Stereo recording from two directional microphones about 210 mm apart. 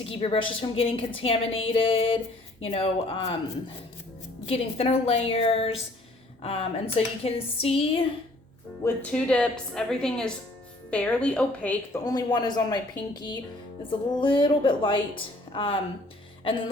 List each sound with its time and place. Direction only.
0.0 s a woman's voice: 25° left (ahead or behind)
4.4 s a woman's voice: 25° left (ahead or behind)
8.8 s a woman's voice: 5° left (ahead or behind)
12.0 s a woman's voice: 20° left (ahead or behind)
16.4 s music: 25° left (ahead or behind)